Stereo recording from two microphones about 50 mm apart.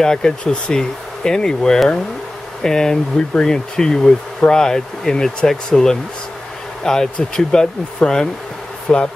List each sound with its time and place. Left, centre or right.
0.0 s speech: centre